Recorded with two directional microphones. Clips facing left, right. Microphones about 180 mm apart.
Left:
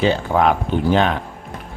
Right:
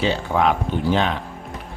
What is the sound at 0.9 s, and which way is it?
Speech, 55° left (ahead or behind).